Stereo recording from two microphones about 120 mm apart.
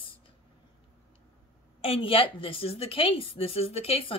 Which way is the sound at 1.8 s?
55° left (ahead or behind).